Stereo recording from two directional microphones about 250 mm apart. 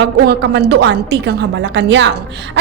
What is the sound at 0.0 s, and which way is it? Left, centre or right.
A woman's voice, right.